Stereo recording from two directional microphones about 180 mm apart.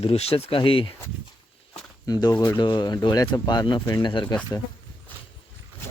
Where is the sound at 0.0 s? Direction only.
35° left (ahead or behind).